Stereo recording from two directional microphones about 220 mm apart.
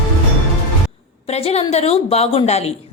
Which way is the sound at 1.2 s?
30° left (ahead or behind).